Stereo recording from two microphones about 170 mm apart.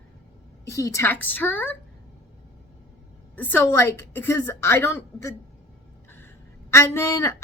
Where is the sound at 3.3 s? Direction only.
10° left (ahead or behind).